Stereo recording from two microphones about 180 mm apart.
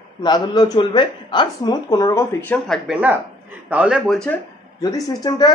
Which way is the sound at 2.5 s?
10° left (ahead or behind).